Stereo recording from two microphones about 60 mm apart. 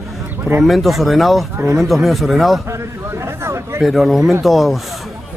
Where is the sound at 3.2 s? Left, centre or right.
Right.